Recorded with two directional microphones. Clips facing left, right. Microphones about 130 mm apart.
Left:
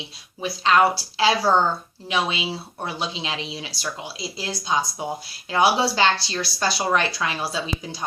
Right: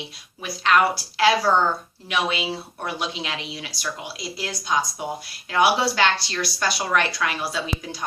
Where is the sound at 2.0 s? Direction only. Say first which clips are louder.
Even; 30° left (ahead or behind).